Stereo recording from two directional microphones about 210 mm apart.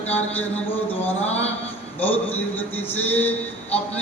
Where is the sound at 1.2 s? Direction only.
30° left (ahead or behind).